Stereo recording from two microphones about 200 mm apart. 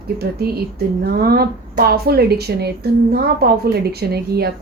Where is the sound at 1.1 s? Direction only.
50° right (ahead or behind).